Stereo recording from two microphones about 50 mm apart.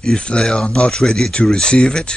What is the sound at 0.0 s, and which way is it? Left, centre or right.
Speech, centre.